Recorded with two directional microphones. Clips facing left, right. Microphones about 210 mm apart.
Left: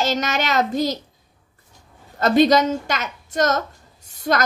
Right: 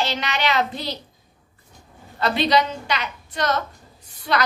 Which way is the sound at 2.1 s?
45° left (ahead or behind).